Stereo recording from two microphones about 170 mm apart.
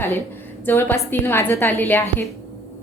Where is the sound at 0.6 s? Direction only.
10° left (ahead or behind).